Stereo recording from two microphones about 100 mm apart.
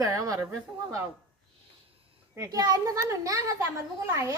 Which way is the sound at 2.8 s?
30° right (ahead or behind).